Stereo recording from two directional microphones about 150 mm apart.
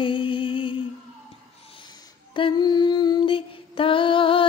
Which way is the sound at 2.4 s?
30° left (ahead or behind).